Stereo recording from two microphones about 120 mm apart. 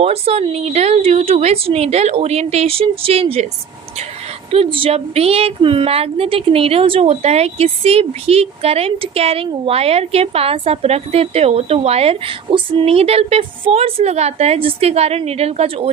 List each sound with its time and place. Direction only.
0.0 s a woman's voice: 55° right (ahead or behind)
4.5 s a woman's voice: 50° right (ahead or behind)